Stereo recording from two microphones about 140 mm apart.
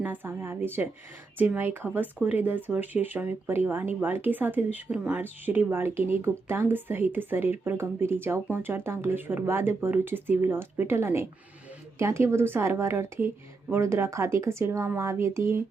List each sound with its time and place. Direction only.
0.0 s speech: 15° right (ahead or behind)